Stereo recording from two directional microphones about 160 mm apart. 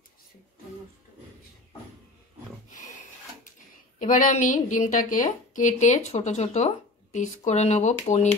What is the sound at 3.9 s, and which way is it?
A woman's voice, 55° left (ahead or behind).